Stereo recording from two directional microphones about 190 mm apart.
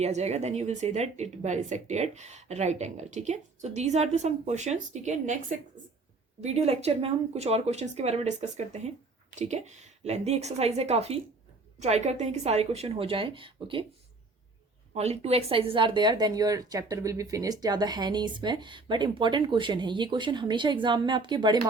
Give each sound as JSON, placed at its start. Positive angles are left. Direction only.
{"t": 0.0, "sound": "speech", "side_deg": -35}
{"t": 14.9, "sound": "speech", "side_deg": -35}